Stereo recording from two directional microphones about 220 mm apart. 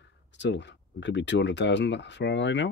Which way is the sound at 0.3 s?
55° left (ahead or behind).